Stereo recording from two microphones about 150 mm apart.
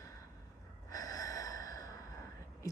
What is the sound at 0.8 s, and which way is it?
Snort, 25° left (ahead or behind).